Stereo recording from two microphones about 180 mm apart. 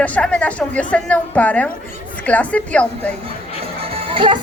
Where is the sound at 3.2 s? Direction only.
30° right (ahead or behind).